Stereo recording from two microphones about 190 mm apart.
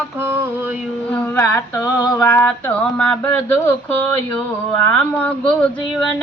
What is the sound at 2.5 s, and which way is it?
Speech, 10° left (ahead or behind).